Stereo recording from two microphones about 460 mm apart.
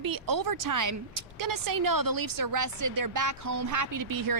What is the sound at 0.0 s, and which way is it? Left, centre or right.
A woman's voice, right.